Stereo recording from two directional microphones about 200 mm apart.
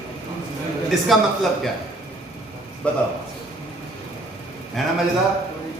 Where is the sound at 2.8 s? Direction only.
5° left (ahead or behind).